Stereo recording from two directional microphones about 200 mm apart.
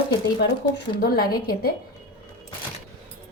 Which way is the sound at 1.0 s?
50° left (ahead or behind).